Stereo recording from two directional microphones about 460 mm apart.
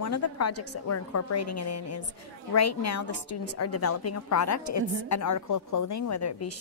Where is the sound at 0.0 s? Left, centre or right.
Left.